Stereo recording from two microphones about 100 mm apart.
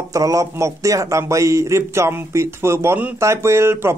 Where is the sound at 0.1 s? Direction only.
35° right (ahead or behind).